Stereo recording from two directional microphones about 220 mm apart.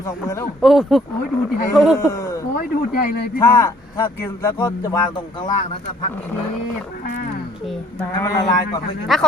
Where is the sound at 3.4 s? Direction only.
15° left (ahead or behind).